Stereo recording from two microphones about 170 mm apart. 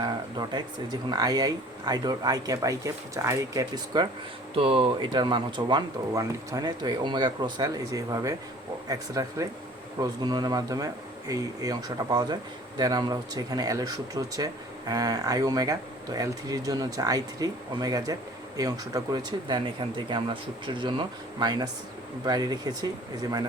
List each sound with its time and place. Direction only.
0.0 s speech: 25° right (ahead or behind)
4.5 s speech: 35° right (ahead or behind)